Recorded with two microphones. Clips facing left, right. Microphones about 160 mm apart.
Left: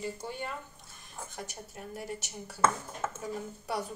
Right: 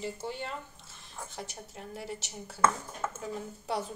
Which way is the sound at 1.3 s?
25° right (ahead or behind).